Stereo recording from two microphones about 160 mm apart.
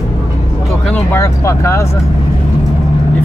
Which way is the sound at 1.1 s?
15° left (ahead or behind).